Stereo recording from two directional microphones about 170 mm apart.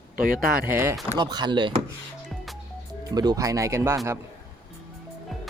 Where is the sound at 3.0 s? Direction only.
25° right (ahead or behind).